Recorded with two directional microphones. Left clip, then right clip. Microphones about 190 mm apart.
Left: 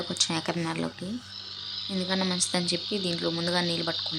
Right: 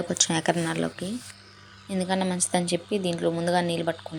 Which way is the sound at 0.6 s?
5° right (ahead or behind).